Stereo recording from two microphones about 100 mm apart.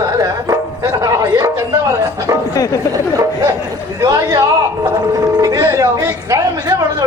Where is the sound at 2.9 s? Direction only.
35° right (ahead or behind).